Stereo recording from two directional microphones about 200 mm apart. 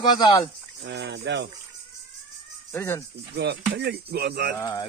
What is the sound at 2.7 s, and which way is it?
Speech, 15° left (ahead or behind).